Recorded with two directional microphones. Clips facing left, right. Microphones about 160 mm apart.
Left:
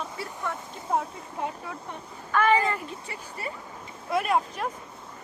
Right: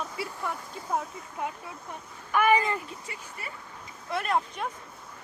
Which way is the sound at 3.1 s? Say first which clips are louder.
Left 5 dB; 30° left (ahead or behind).